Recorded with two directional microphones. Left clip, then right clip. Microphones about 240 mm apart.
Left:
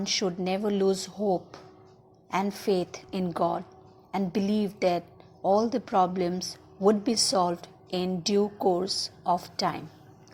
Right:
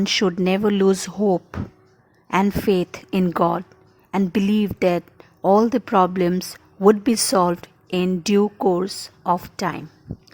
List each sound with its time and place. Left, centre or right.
0.0 s a woman's voice: right